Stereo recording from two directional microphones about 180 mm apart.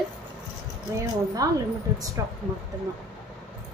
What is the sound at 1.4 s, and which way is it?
Speech, 20° right (ahead or behind).